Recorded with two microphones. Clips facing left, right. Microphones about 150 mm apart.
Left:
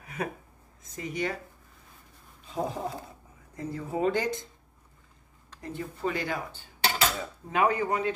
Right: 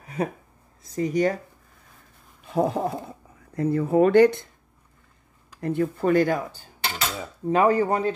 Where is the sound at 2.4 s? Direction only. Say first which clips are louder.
Right 8 dB; 60° right (ahead or behind).